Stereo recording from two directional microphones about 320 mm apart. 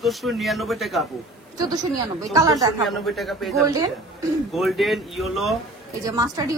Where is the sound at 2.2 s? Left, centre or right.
Centre.